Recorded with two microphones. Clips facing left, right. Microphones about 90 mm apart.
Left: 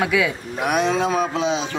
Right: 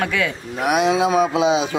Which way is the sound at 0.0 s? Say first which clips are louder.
Left 2 dB; 10° left (ahead or behind).